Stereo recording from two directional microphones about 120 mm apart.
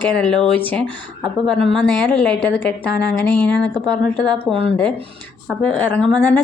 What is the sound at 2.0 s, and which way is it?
A woman's voice, 15° left (ahead or behind).